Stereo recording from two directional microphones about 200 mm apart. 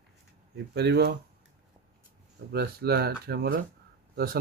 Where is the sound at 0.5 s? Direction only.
55° right (ahead or behind).